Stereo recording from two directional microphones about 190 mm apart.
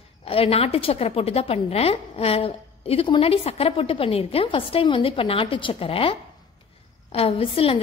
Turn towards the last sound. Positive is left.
turn(degrees=30)  # may be behind; listen again after turning